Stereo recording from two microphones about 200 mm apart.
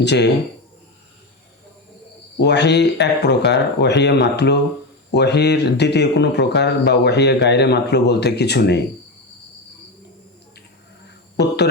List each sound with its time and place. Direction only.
0.0 s speech: 60° left (ahead or behind)
2.4 s speech: 60° left (ahead or behind)
11.3 s speech: 55° left (ahead or behind)